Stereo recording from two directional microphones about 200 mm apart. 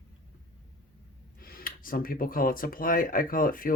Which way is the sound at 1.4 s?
45° left (ahead or behind).